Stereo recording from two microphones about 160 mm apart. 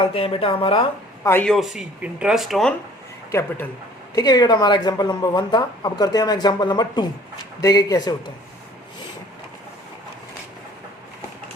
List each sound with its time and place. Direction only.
0.0 s speech: 35° left (ahead or behind)
1.2 s speech: 15° left (ahead or behind)
1.5 s speech: centre (ahead or behind)
4.1 s speech: 25° left (ahead or behind)